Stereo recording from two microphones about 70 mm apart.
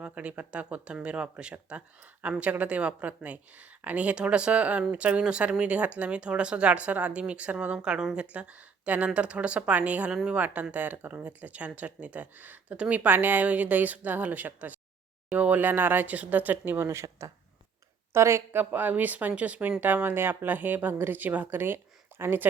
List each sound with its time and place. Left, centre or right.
0.0 s speech: centre
7.8 s speech: centre; by 18.4 s right
18.5 s speech: right